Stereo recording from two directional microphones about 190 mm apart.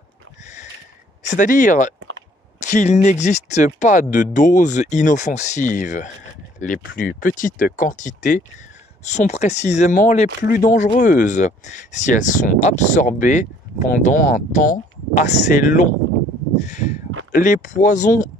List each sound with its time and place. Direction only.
1.2 s speech: 40° left (ahead or behind)
16.5 s crow: 40° left (ahead or behind)
17.3 s speech: 45° left (ahead or behind)